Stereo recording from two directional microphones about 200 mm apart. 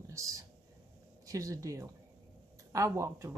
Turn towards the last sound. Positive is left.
turn(degrees=-15)  # may be behind; listen again after turning